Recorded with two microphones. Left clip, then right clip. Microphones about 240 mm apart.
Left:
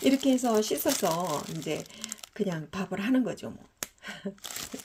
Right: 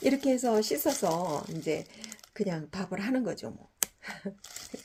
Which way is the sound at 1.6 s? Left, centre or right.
Left.